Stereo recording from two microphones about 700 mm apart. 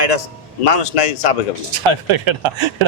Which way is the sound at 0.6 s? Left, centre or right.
Left.